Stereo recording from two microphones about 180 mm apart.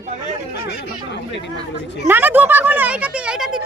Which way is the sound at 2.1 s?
10° right (ahead or behind).